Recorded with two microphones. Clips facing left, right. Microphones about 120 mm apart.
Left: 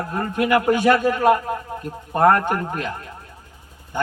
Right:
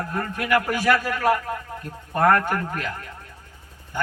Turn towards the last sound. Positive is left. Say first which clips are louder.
# left 3 dB
turn(degrees=25)  # may be behind; listen again after turning